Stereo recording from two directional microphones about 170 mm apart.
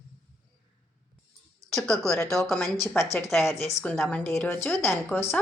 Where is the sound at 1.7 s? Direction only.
5° left (ahead or behind).